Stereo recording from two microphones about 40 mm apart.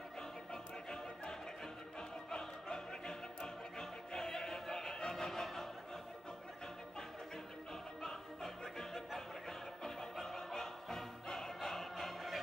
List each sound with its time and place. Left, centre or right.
2.3 s opera: centre
4.1 s music: centre
8.0 s music: centre